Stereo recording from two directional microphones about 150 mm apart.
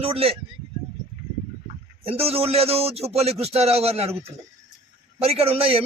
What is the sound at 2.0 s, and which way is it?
A man's voice, 40° right (ahead or behind).